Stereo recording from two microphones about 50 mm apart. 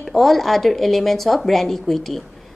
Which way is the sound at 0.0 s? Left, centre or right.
Centre.